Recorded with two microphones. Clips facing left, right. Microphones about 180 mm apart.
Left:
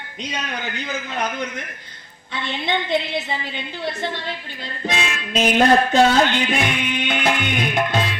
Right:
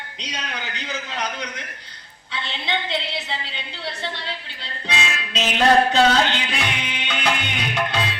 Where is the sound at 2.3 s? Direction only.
50° left (ahead or behind).